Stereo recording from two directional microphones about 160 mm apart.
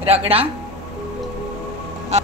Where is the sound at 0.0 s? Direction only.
40° right (ahead or behind).